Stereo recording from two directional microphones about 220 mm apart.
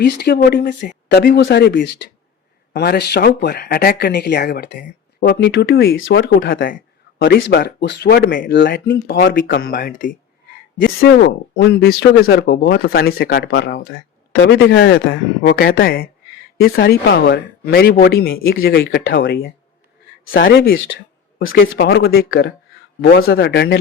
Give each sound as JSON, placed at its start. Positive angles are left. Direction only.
{"t": 0.0, "sound": "speech", "side_deg": 45}
{"t": 8.9, "sound": "speech", "side_deg": 55}